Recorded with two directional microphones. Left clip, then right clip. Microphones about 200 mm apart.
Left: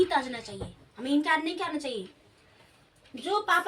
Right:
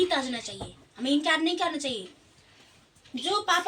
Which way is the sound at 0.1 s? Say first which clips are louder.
Even; 20° right (ahead or behind).